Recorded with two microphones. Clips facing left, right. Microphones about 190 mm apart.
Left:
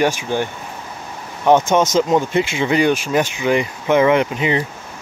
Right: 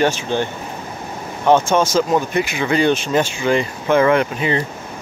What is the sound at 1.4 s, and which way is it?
Speech, 20° left (ahead or behind).